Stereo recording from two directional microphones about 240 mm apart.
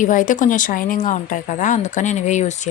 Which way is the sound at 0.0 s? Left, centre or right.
Left.